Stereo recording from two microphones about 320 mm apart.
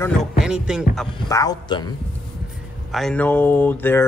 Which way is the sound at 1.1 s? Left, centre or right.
Centre.